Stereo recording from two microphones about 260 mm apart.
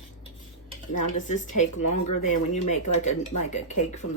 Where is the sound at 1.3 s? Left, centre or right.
Left.